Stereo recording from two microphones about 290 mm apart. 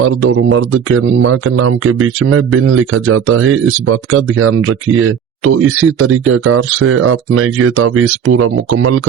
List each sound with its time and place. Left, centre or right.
0.0 s speech: right